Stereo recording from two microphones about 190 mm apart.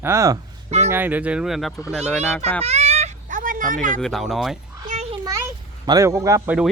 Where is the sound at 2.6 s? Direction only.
35° right (ahead or behind).